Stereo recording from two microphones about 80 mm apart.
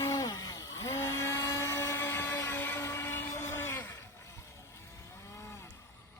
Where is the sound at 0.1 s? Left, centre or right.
Left.